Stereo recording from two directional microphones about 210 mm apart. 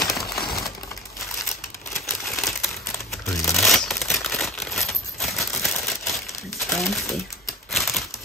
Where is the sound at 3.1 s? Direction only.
Centre (ahead or behind).